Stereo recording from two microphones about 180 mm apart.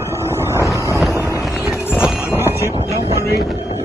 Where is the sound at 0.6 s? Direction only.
15° left (ahead or behind).